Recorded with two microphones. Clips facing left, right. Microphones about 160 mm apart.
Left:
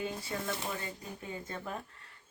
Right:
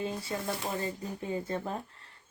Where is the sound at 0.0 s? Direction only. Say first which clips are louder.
Right 3 dB; 30° right (ahead or behind).